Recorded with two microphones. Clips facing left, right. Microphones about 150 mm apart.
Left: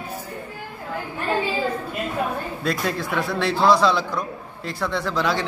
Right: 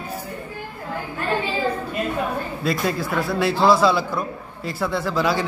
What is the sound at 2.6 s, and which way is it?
A man's voice, 5° right (ahead or behind).